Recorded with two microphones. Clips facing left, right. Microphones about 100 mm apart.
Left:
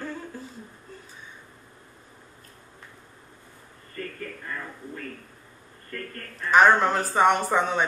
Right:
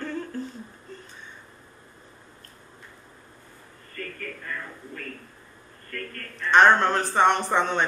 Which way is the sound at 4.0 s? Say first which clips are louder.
Left 1 dB; 20° left (ahead or behind).